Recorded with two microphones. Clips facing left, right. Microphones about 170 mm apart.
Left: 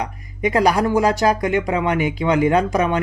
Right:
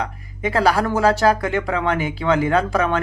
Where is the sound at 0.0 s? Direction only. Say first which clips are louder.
Left 2 dB; 15° left (ahead or behind).